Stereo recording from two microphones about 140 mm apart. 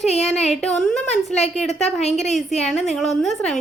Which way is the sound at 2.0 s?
50° left (ahead or behind).